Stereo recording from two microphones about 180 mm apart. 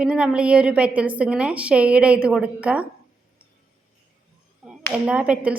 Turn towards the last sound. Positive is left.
turn(degrees=-5)  # may be behind; listen again after turning